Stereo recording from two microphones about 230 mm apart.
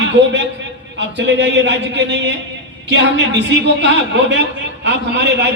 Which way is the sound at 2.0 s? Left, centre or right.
Right.